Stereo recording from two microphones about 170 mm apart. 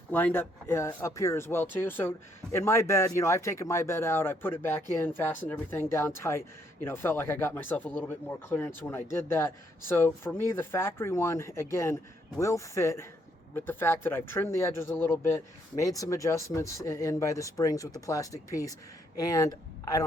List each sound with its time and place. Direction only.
0.1 s speech: 10° left (ahead or behind)